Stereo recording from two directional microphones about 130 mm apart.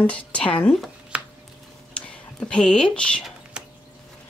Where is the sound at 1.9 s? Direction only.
10° left (ahead or behind).